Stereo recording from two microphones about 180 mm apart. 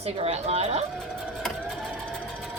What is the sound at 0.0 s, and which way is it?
Speech, 35° right (ahead or behind).